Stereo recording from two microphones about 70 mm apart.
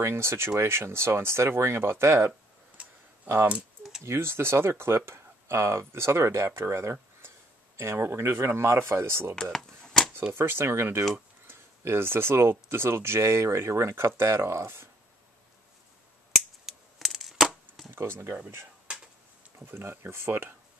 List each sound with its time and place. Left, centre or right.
0.0 s speech: right
4.0 s speech: right
9.3 s speech: centre
10.3 s speech: right
16.6 s a sound: centre
17.9 s speech: right
19.6 s speech: right